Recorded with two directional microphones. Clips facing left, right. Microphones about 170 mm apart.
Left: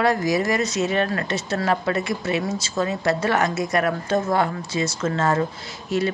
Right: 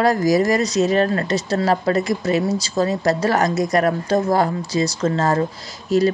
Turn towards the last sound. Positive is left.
turn(degrees=-35)  # may be behind; listen again after turning